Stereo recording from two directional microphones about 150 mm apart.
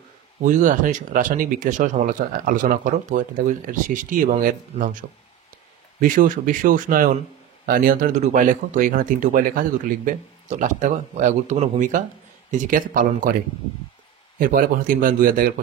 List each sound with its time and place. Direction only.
0.4 s speech: 55° right (ahead or behind)
5.9 s speech: 65° right (ahead or behind)
7.6 s speech: 80° right
14.4 s speech: 65° right (ahead or behind)